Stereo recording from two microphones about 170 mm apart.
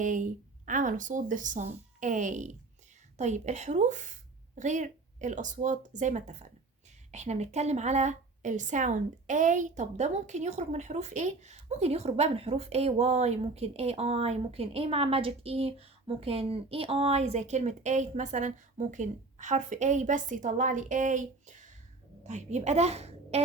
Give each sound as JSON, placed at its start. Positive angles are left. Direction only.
{"t": 0.0, "sound": "a woman's voice", "side_deg": -50}